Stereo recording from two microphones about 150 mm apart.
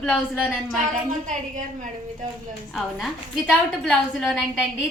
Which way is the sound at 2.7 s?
5° left (ahead or behind).